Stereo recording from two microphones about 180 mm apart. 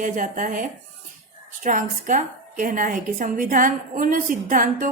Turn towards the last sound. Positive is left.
turn(degrees=-50)  # may be behind; listen again after turning